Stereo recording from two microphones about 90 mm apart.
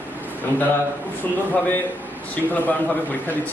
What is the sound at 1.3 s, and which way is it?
A man's voice, 20° left (ahead or behind).